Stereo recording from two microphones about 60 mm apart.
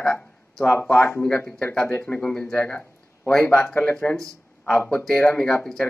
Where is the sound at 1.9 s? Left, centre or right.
Left.